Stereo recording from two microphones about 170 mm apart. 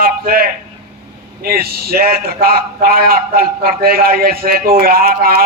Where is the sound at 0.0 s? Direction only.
60° right (ahead or behind).